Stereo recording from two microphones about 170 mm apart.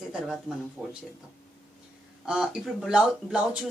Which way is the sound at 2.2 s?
5° right (ahead or behind).